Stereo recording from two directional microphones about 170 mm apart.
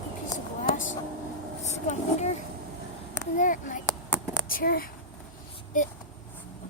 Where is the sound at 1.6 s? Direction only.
40° left (ahead or behind); by 4.9 s 60° left (ahead or behind).